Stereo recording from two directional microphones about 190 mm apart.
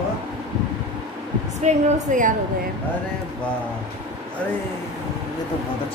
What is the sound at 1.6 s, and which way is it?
Speech, 45° right (ahead or behind).